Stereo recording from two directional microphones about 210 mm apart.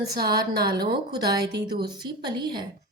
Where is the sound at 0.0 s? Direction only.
50° right (ahead or behind).